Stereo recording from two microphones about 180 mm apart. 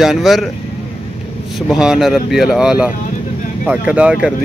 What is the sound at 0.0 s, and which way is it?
Speech, centre (ahead or behind).